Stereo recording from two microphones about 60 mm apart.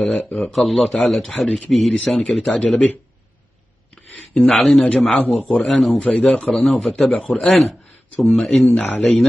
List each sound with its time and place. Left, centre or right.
0.0 s speech: centre
2.5 s speech: left
4.6 s speech: centre
8.7 s speech: centre
9.0 s speech: centre